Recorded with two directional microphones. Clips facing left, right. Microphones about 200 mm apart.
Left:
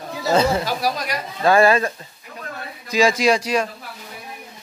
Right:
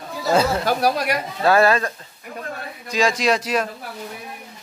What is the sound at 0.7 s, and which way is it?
Speech, 60° right (ahead or behind).